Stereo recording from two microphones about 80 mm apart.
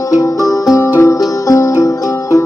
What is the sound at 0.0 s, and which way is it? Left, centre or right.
Music, left.